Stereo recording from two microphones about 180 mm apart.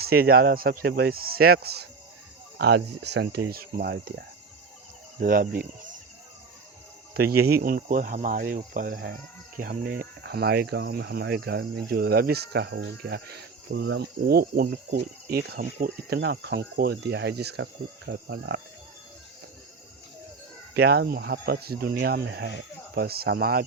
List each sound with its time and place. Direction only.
0.0 s speech: 55° right (ahead or behind)
5.2 s speech: 50° right (ahead or behind)
7.2 s speech: 60° right (ahead or behind)
20.7 s speech: 65° right (ahead or behind)